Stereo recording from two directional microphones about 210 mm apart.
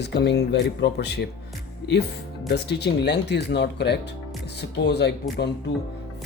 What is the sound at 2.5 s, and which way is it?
Speech, 55° left (ahead or behind).